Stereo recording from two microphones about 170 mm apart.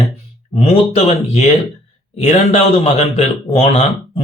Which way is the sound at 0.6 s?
40° left (ahead or behind).